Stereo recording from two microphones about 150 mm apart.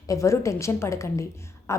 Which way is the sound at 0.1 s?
20° left (ahead or behind).